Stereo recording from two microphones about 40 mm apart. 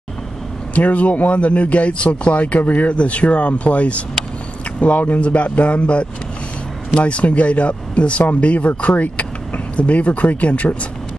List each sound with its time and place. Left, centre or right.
0.7 s speech: left